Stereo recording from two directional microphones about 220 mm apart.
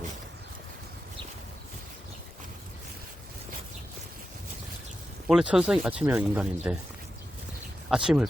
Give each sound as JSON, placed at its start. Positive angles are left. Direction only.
{"t": 5.3, "sound": "speech", "side_deg": 0}
{"t": 7.9, "sound": "speech", "side_deg": -5}